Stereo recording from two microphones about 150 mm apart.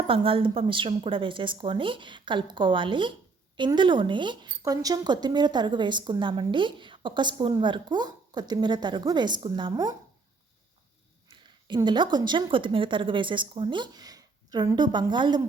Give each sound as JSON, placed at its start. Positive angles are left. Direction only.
{"t": 0.1, "sound": "a woman's voice", "side_deg": -35}
{"t": 11.3, "sound": "a woman's voice", "side_deg": -30}